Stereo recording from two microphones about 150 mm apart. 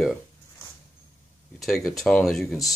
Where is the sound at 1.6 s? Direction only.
Centre (ahead or behind).